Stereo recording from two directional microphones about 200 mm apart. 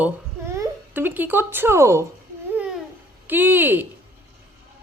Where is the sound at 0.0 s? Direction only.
15° right (ahead or behind).